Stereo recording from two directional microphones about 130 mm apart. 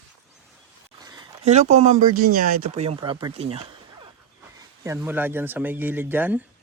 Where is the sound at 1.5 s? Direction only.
60° right (ahead or behind); by 2.8 s 90° right.